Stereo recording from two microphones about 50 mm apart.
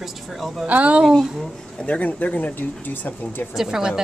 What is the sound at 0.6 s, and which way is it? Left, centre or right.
Speech, right.